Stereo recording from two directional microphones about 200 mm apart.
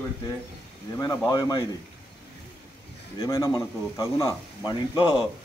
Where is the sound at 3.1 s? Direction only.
20° left (ahead or behind).